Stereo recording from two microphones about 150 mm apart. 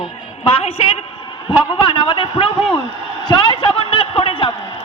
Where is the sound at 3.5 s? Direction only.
35° left (ahead or behind).